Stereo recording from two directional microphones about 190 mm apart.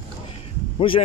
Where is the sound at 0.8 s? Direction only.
30° left (ahead or behind).